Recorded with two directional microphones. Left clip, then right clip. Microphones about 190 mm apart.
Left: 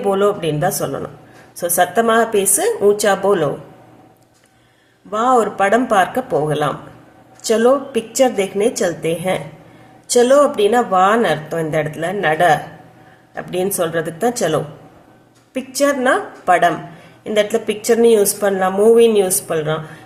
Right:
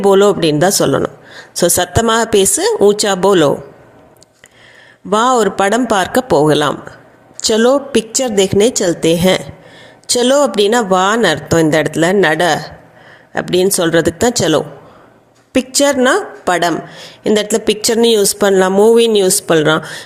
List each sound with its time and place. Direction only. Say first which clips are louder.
0.0 s speech: right 6 dB; 45° right (ahead or behind)
5.1 s speech: right 3 dB; 45° right (ahead or behind)